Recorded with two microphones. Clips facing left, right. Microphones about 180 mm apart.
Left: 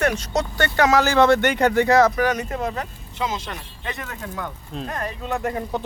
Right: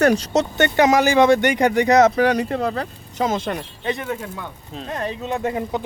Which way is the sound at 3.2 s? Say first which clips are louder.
Right 7 dB; 50° right (ahead or behind).